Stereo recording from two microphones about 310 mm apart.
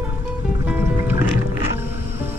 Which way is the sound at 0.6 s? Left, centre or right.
Centre.